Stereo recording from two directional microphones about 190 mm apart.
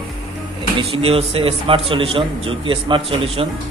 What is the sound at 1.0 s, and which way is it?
A man's voice, 30° right (ahead or behind).